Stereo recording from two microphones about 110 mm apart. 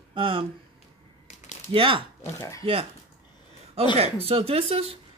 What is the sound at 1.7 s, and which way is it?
Speech, 55° right (ahead or behind).